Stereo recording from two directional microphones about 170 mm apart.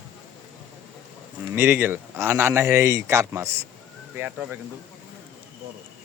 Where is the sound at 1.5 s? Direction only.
15° right (ahead or behind).